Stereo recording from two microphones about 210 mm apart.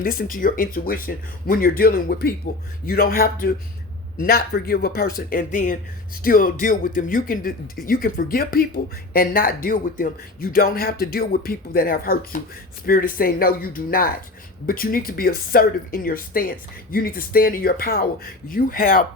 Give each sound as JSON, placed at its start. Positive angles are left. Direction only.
{"t": 0.0, "sound": "speech", "side_deg": 40}